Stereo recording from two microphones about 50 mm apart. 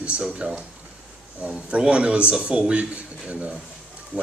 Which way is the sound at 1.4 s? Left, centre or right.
Right.